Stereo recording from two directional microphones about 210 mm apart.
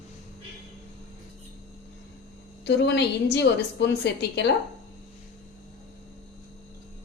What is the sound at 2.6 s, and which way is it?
A woman's voice, 55° left (ahead or behind).